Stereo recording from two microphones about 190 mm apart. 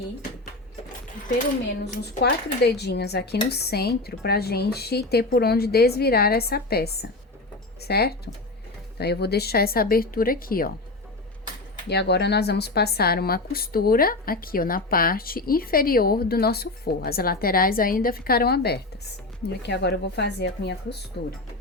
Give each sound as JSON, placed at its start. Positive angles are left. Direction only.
{"t": 2.2, "sound": "a woman's voice", "side_deg": 60}
{"t": 11.9, "sound": "a woman's voice", "side_deg": 60}